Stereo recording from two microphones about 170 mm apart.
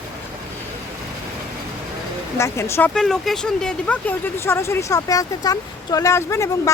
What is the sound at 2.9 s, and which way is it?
Speech, 5° left (ahead or behind).